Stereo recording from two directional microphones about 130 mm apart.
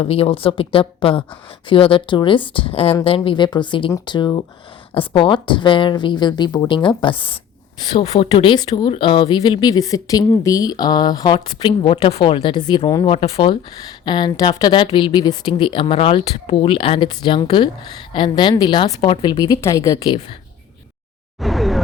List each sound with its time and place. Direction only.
0.0 s speech: 45° left (ahead or behind)
13.1 s speech: 50° left (ahead or behind)
14.0 s speech: 35° left (ahead or behind)
21.4 s a sound: centre (ahead or behind)